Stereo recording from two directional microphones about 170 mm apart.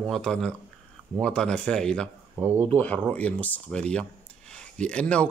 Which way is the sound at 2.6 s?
10° left (ahead or behind).